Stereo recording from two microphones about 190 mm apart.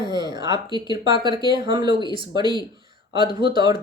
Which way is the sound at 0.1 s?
20° right (ahead or behind).